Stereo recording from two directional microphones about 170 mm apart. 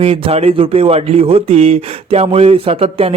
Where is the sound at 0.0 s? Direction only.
35° right (ahead or behind).